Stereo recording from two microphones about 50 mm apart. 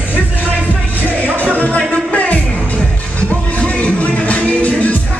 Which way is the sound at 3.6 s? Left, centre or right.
Left.